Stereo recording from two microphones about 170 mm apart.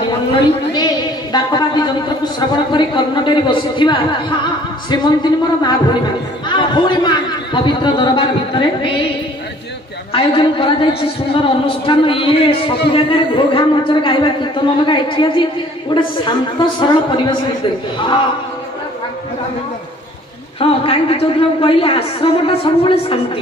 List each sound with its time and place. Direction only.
1.3 s a sound: 25° left (ahead or behind)
2.7 s a man's voice: 25° left (ahead or behind)
10.1 s a man's voice: 30° left (ahead or behind)
20.5 s a man's voice: 35° left (ahead or behind)